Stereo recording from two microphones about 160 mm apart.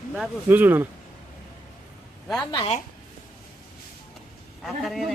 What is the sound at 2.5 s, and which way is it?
Speech, 35° left (ahead or behind).